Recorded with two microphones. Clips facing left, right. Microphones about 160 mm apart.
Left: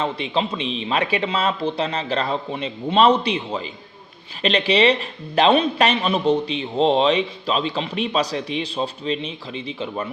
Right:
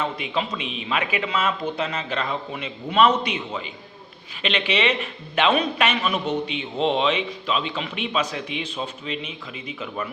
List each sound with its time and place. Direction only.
0.0 s speech: 30° left (ahead or behind)